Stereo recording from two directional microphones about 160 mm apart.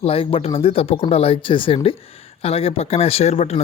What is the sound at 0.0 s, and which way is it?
Speech, 35° left (ahead or behind).